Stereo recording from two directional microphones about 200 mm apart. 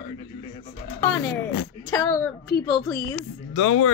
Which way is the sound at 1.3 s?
85° left.